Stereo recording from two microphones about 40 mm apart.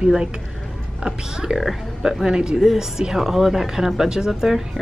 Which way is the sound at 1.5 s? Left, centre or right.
Centre.